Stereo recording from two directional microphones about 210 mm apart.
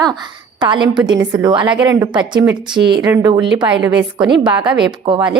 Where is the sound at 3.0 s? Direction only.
20° right (ahead or behind).